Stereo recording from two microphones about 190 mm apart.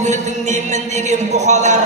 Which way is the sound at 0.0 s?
40° right (ahead or behind).